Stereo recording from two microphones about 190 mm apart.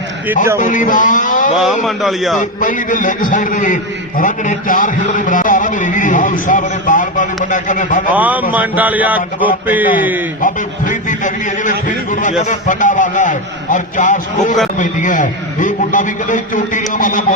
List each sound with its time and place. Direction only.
0.6 s a man's voice: 40° left (ahead or behind)
1.6 s a man's voice: centre (ahead or behind)
2.4 s a man's voice: 45° left (ahead or behind)
8.1 s a man's voice: 10° right (ahead or behind)
10.4 s a man's voice: 45° left (ahead or behind)